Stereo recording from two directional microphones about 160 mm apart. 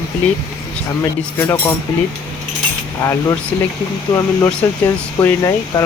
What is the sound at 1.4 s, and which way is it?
Speech, 15° left (ahead or behind).